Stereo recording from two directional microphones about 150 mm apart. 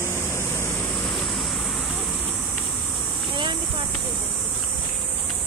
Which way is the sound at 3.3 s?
30° right (ahead or behind).